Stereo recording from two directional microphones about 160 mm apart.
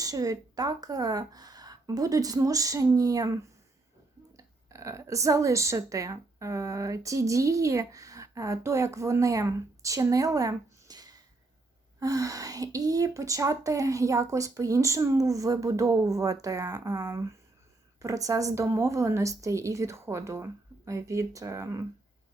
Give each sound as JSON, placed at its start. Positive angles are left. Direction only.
{"t": 0.0, "sound": "speech", "side_deg": -20}